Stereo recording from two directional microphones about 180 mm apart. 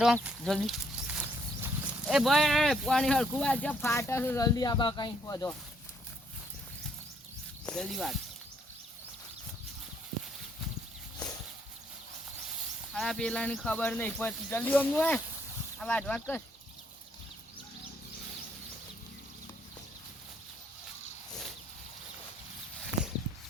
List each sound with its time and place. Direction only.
0.0 s speech: centre (ahead or behind); by 5.5 s 20° left (ahead or behind)
7.6 s speech: 5° left (ahead or behind)
12.9 s speech: centre (ahead or behind)